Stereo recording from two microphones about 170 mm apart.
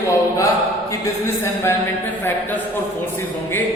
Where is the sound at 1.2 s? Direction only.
15° left (ahead or behind).